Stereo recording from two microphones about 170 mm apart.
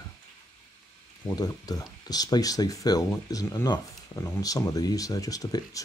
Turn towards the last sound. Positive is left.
turn(degrees=20)  # may be behind; listen again after turning